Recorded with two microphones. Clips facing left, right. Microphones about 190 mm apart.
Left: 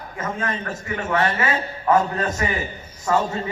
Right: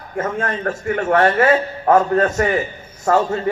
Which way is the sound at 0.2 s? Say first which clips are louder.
Right 5 dB; 50° right (ahead or behind).